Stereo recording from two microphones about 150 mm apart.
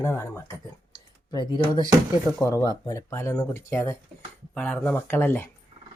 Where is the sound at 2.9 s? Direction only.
20° left (ahead or behind).